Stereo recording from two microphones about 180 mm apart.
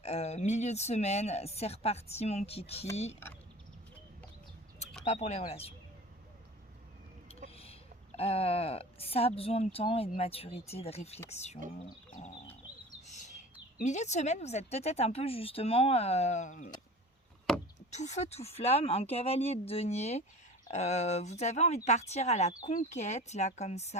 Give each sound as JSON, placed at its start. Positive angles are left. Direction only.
{"t": 0.0, "sound": "speech", "side_deg": 35}
{"t": 5.0, "sound": "speech", "side_deg": 40}
{"t": 7.5, "sound": "speech", "side_deg": 30}
{"t": 11.8, "sound": "a sound", "side_deg": 40}
{"t": 13.1, "sound": "chirp", "side_deg": 40}
{"t": 13.8, "sound": "speech", "side_deg": 40}
{"t": 17.7, "sound": "speech", "side_deg": 40}